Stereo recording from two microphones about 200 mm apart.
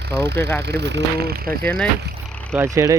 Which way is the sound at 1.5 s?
5° left (ahead or behind).